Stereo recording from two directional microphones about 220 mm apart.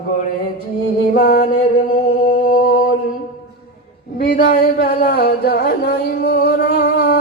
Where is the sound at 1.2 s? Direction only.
40° left (ahead or behind).